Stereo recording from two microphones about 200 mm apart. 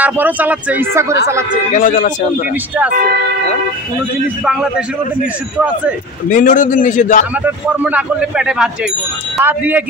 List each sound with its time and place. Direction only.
0.0 s speech: 10° right (ahead or behind)
1.8 s a man's voice: 40° left (ahead or behind)
4.5 s speech: 5° right (ahead or behind)
6.3 s a man's voice: 40° left (ahead or behind)
7.4 s speech: 5° right (ahead or behind)